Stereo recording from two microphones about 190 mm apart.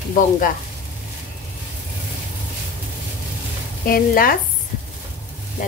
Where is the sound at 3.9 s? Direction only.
50° left (ahead or behind).